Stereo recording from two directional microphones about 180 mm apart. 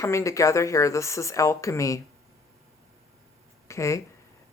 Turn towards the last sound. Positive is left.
turn(degrees=15)  # may be behind; listen again after turning